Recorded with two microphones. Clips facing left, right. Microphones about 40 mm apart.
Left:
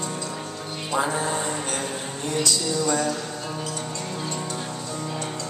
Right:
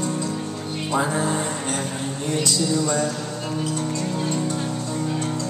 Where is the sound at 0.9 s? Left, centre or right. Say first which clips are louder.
Right 1 dB; centre.